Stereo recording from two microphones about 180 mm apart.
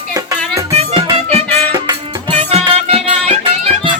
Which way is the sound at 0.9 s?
25° right (ahead or behind).